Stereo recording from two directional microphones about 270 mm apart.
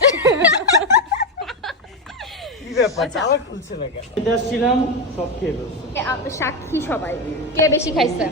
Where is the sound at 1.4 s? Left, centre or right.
Centre.